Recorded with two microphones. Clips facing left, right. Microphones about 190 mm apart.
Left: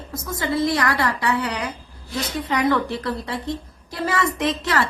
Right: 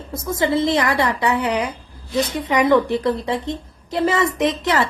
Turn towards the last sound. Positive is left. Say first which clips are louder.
# right 3 dB
turn(degrees=-20)  # may be behind; listen again after turning